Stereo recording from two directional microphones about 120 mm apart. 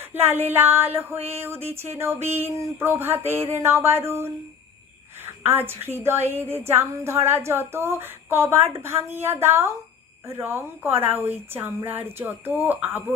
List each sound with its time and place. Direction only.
0.1 s speech: 20° right (ahead or behind)